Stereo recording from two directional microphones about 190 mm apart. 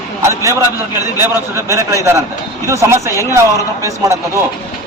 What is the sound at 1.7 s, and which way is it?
A man's voice, 15° right (ahead or behind).